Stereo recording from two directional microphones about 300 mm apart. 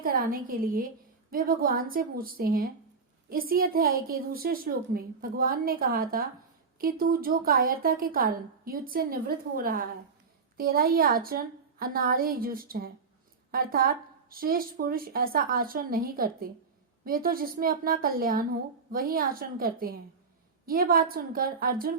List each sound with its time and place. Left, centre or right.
0.0 s a woman's voice: right